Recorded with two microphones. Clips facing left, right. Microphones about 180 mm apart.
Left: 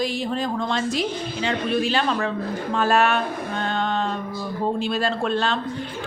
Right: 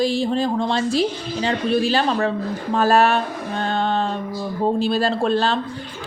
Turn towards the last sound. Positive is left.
turn(degrees=-35)  # may be behind; listen again after turning